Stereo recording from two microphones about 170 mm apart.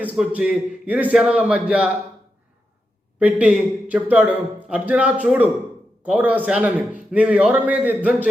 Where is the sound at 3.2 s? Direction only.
10° right (ahead or behind).